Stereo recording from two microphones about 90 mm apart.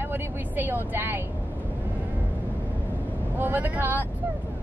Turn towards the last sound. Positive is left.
turn(degrees=-20)  # may be behind; listen again after turning